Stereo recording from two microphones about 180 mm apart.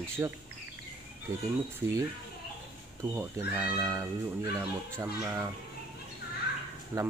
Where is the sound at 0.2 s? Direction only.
15° right (ahead or behind).